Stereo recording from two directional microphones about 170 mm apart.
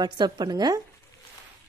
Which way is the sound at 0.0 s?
25° right (ahead or behind).